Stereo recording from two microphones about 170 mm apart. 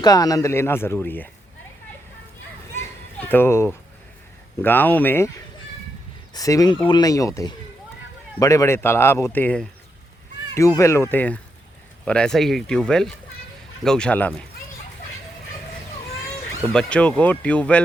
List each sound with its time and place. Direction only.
0.0 s speech: 20° left (ahead or behind)
2.7 s children playing: 10° left (ahead or behind)
4.6 s speech: 10° left (ahead or behind)
6.3 s speech: 20° left (ahead or behind)
16.6 s speech: 5° left (ahead or behind)